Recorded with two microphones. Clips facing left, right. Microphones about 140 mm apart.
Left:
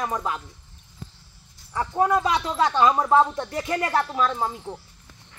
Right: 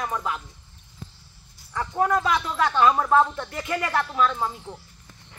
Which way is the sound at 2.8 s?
15° left (ahead or behind).